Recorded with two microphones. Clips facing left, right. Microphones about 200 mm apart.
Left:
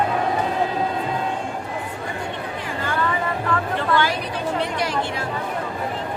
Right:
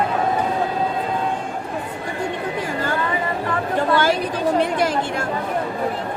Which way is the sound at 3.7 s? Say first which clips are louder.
Right 7 dB; 45° right (ahead or behind).